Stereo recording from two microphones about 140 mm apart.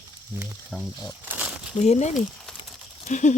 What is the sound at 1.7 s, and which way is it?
Speech, 55° left (ahead or behind).